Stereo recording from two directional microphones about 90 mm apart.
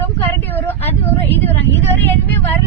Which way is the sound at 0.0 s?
20° left (ahead or behind).